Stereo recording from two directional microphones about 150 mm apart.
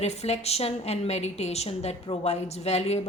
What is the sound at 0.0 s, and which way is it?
A woman's voice, 45° left (ahead or behind).